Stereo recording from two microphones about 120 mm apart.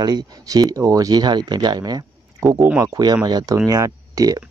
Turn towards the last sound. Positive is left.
turn(degrees=-30)  # may be behind; listen again after turning